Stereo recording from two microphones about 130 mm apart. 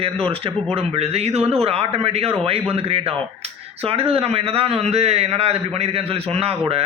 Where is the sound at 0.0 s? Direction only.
45° right (ahead or behind).